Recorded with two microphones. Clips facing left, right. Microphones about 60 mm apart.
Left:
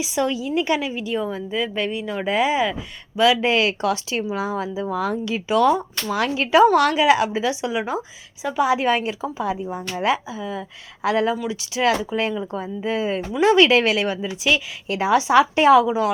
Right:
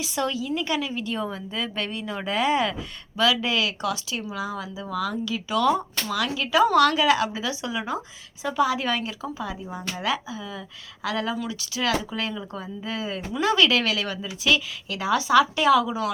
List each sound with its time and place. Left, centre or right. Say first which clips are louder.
0.0 s a woman's voice: left 4 dB; centre
3.2 s speech: left 5 dB; left
6.1 s speech: left 6 dB; left
6.7 s a woman's voice: left 3 dB; left